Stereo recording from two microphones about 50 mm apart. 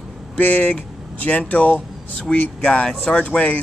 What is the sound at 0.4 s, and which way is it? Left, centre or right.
Speech, left.